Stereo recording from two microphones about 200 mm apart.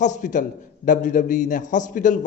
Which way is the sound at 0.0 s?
40° left (ahead or behind).